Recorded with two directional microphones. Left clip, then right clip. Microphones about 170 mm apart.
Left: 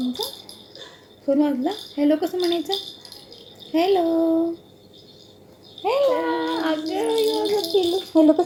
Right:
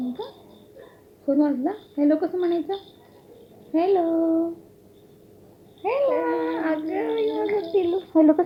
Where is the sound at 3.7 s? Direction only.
10° right (ahead or behind).